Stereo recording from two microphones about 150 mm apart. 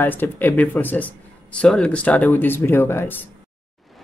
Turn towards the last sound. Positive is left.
turn(degrees=15)  # may be behind; listen again after turning